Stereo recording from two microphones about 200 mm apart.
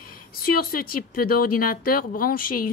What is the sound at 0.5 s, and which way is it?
Speech, 45° left (ahead or behind).